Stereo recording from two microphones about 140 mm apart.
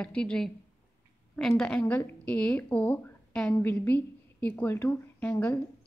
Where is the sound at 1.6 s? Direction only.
5° left (ahead or behind).